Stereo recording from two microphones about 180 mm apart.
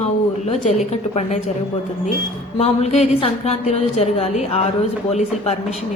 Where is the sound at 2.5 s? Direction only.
35° left (ahead or behind).